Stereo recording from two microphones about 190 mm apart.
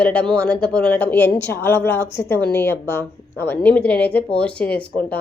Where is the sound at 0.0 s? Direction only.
5° left (ahead or behind).